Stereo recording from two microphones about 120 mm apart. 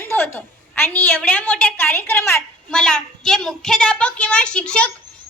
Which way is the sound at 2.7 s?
5° left (ahead or behind).